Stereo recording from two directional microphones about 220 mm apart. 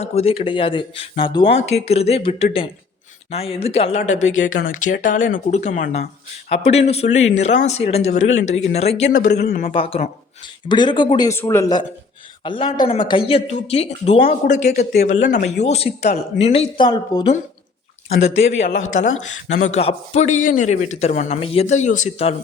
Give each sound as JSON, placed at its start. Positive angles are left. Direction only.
{"t": 0.0, "sound": "a man's voice", "side_deg": 30}
{"t": 9.0, "sound": "a man's voice", "side_deg": 45}
{"t": 9.7, "sound": "speech", "side_deg": 25}
{"t": 19.6, "sound": "a man's voice", "side_deg": 30}